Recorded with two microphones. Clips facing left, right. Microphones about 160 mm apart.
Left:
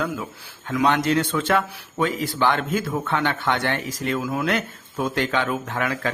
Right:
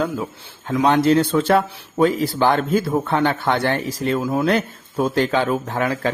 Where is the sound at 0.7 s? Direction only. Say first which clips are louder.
Right 5 dB; 30° right (ahead or behind).